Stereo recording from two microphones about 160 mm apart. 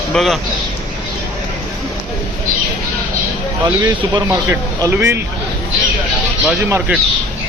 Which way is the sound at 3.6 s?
20° right (ahead or behind).